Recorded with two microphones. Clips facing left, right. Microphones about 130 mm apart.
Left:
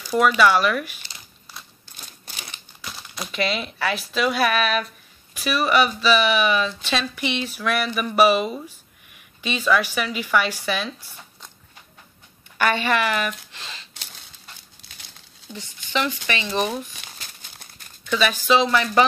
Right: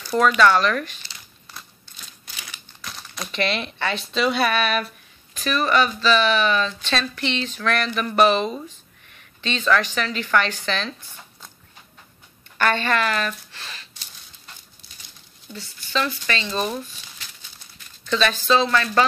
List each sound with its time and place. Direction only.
0.4 s speech: 10° left (ahead or behind)
2.8 s speech: 5° left (ahead or behind)
5.3 s speech: 10° left (ahead or behind)
12.5 s speech: 10° left (ahead or behind)
15.5 s speech: 15° left (ahead or behind)
18.0 s speech: 10° left (ahead or behind)